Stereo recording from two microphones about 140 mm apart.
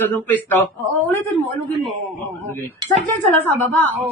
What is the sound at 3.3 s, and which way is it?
Speech, 15° left (ahead or behind).